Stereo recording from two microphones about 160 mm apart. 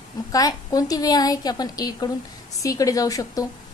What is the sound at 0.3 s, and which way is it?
A woman's voice, 20° left (ahead or behind).